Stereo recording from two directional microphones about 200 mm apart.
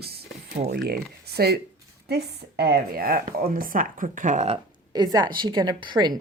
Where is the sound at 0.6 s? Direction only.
50° right (ahead or behind).